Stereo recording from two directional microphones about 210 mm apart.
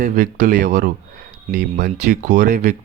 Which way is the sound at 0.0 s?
35° right (ahead or behind).